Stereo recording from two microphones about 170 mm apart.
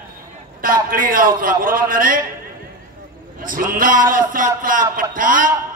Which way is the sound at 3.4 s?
55° right (ahead or behind).